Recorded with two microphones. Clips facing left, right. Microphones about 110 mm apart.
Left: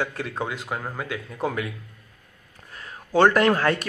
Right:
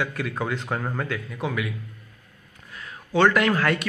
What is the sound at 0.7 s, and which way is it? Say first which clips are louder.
Speech: right 2 dB; centre (ahead or behind).